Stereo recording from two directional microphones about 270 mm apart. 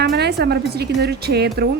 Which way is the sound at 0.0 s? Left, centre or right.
Right.